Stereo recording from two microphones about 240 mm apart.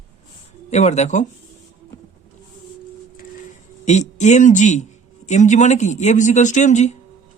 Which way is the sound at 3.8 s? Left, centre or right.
Left.